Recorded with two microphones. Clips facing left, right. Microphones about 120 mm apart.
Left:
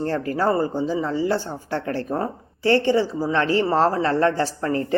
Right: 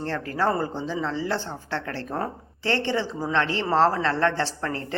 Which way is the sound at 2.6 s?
15° left (ahead or behind).